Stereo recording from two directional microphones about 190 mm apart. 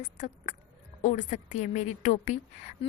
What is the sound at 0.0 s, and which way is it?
A woman's voice, 40° left (ahead or behind).